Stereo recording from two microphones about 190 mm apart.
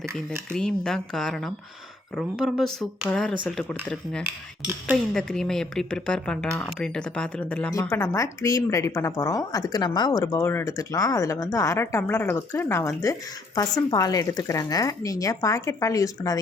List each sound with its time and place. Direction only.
0.5 s speech: 5° left (ahead or behind)
7.7 s speech: 15° left (ahead or behind)